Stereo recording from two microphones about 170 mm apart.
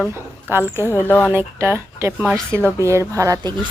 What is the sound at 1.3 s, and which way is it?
A woman's voice, 15° right (ahead or behind).